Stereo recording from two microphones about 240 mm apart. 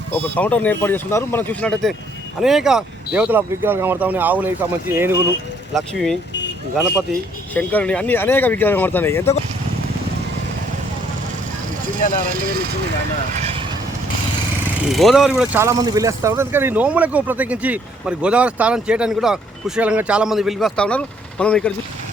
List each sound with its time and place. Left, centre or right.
0.1 s speech: centre
5.7 s speech: centre
7.5 s speech: centre
12.2 s speech: right
13.3 s vehicle: right
14.8 s speech: centre